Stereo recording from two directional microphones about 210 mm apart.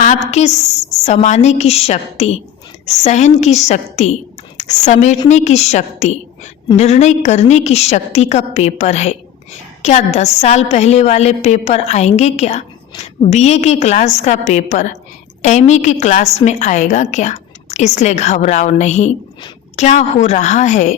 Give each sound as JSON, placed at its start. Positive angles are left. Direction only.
{"t": 0.0, "sound": "a woman's voice", "side_deg": 35}